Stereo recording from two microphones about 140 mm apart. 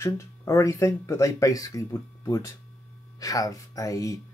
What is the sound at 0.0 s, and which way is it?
Speech, 20° left (ahead or behind).